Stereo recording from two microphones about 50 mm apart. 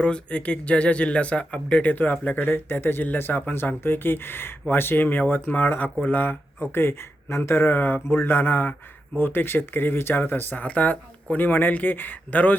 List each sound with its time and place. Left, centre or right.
0.0 s speech: left
2.5 s speech: left
7.5 s speech: left
10.6 s speech: left